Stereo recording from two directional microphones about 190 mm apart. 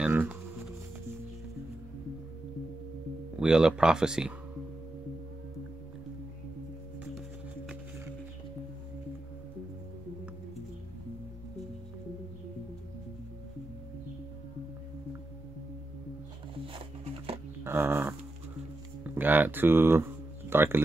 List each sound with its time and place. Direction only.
0.0 s music: 10° right (ahead or behind)
3.3 s speech: 5° right (ahead or behind)
17.6 s a sound: 10° right (ahead or behind)